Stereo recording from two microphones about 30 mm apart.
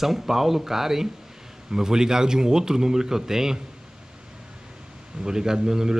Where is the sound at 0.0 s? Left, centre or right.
Centre.